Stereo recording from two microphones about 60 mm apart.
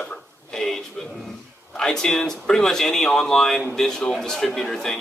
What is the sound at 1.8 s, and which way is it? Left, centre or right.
Speech, centre.